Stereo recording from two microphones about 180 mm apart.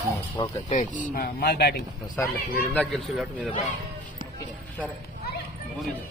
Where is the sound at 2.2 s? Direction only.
10° left (ahead or behind).